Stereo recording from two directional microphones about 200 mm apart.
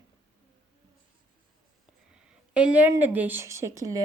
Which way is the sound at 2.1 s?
5° right (ahead or behind).